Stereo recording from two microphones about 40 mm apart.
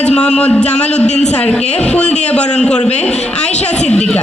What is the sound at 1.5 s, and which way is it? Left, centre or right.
A man's voice, left.